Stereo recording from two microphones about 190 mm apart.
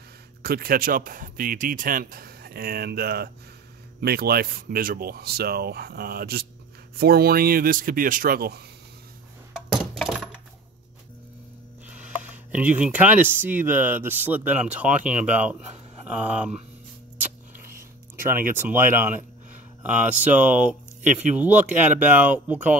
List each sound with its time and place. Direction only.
0.4 s speech: 50° right (ahead or behind)
9.7 s a sound: 5° right (ahead or behind)
11.9 s speech: 5° right (ahead or behind)
18.6 s speech: 10° right (ahead or behind)